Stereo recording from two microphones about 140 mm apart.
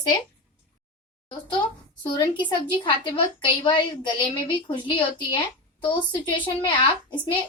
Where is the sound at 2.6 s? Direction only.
35° left (ahead or behind).